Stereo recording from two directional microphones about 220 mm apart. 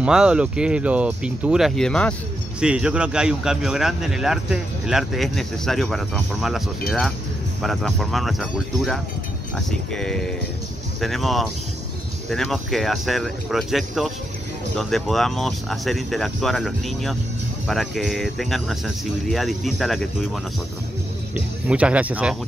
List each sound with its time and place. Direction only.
0.0 s speech: 5° right (ahead or behind)
21.6 s speech: 5° right (ahead or behind)